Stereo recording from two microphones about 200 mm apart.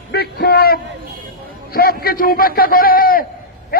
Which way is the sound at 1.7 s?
50° left (ahead or behind).